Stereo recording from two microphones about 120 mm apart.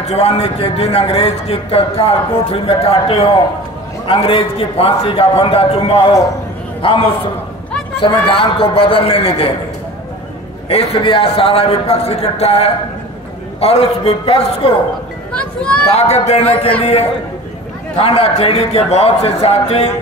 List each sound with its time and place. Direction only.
0.0 s a man's voice: 65° left (ahead or behind)
10.7 s a man's voice: 55° left (ahead or behind)
15.3 s speech: 10° left (ahead or behind)
15.9 s a man's voice: 65° left (ahead or behind)
17.9 s a man's voice: 50° left (ahead or behind)